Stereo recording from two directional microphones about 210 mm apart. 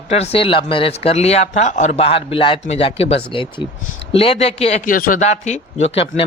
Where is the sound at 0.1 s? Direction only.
30° left (ahead or behind).